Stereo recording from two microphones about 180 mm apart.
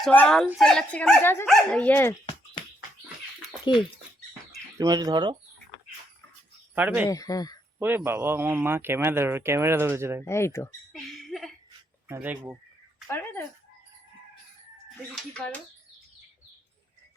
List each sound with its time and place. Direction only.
0.0 s speech: 5° left (ahead or behind)
3.6 s speech: 25° left (ahead or behind)
4.8 s speech: 20° right (ahead or behind)
6.7 s a man's voice: 10° right (ahead or behind)
7.1 s speech: 20° left (ahead or behind)
7.8 s a man's voice: 10° right (ahead or behind)
10.2 s speech: 15° left (ahead or behind)
10.9 s a sound: centre (ahead or behind)
12.0 s a man's voice: 10° right (ahead or behind)
13.1 s speech: 10° left (ahead or behind)
15.1 s speech: 5° left (ahead or behind)